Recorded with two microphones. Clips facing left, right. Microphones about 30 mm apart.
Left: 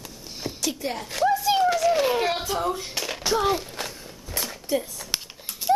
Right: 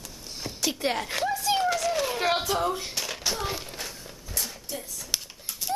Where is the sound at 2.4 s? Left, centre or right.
Centre.